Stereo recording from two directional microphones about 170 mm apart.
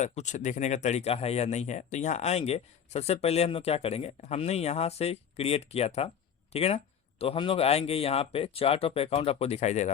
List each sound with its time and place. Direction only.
0.0 s speech: 45° left (ahead or behind)